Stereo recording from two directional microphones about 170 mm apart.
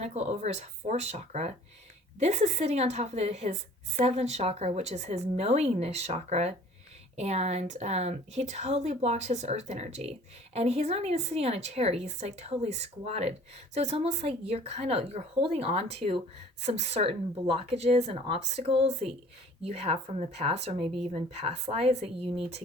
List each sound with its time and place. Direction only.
0.0 s speech: 40° right (ahead or behind)
20.8 s speech: centre (ahead or behind)
21.1 s speech: 40° right (ahead or behind)